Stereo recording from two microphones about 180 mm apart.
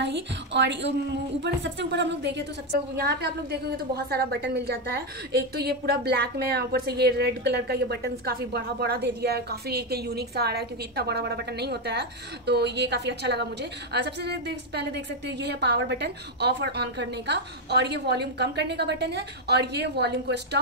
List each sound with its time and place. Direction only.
0.0 s a woman's voice: 75° right (ahead or behind)
3.0 s a woman's voice: 60° right (ahead or behind)